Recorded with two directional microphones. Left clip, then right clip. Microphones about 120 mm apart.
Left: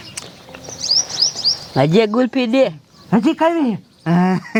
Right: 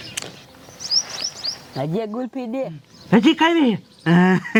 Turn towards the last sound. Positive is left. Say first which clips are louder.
# right 1 dB
turn(degrees=0)  # may be behind; listen again after turning